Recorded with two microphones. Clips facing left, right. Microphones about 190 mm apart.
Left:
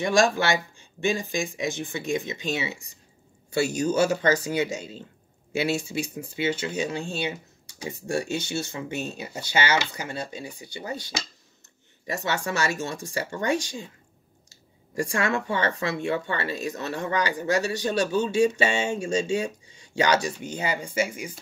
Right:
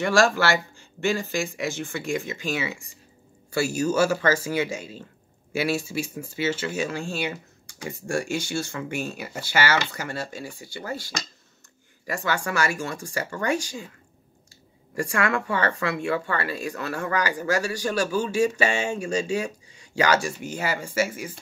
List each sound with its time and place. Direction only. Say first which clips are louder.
0.0 s speech: right 1 dB; 15° left (ahead or behind)
15.0 s speech: right 1 dB; 25° left (ahead or behind)